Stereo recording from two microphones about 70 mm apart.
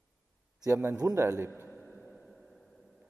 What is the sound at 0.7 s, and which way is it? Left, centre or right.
Speech, right.